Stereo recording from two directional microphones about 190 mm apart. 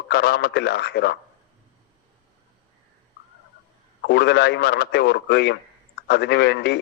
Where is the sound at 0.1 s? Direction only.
60° left (ahead or behind).